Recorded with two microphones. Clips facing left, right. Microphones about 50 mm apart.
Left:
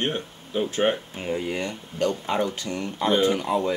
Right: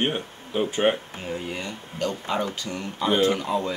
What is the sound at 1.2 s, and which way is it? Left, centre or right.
Speech, centre.